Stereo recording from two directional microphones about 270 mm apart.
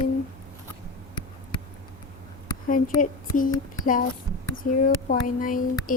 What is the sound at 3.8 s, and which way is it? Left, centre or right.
A woman's voice, left.